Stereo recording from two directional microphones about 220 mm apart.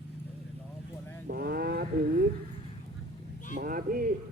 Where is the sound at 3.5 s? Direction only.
40° right (ahead or behind).